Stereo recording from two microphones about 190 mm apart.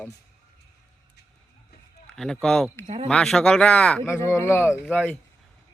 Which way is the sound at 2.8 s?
35° right (ahead or behind).